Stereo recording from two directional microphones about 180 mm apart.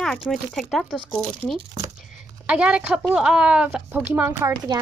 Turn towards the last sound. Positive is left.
turn(degrees=-15)  # may be behind; listen again after turning